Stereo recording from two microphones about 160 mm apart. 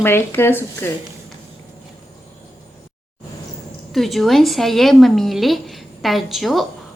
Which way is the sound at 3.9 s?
Centre (ahead or behind).